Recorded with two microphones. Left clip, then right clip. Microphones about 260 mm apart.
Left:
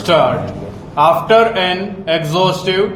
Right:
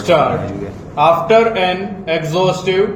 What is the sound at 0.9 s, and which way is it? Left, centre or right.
Mantra, left.